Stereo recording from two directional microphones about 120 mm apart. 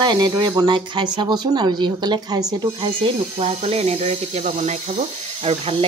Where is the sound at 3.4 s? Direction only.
60° right (ahead or behind).